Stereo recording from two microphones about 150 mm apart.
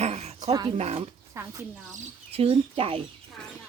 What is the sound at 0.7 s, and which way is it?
Speech, 45° right (ahead or behind).